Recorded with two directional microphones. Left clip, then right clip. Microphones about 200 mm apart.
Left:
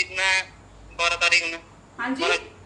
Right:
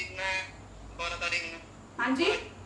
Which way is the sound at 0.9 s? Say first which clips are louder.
Left 12 dB; 60° left (ahead or behind).